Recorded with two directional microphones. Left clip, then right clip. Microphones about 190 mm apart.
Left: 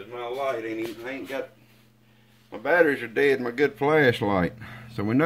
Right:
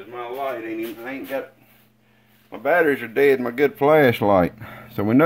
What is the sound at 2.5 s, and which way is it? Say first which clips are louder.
Speech: right 2 dB; 50° right (ahead or behind).